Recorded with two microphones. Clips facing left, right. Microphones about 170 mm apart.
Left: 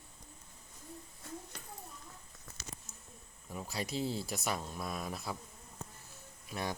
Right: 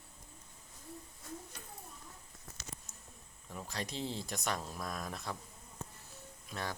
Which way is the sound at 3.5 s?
10° left (ahead or behind).